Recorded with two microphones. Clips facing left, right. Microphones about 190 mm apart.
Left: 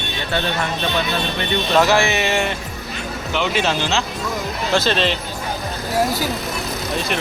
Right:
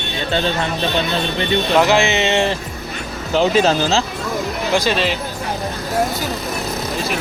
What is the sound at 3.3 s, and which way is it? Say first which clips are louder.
Speech: right 6 dB; 40° right (ahead or behind).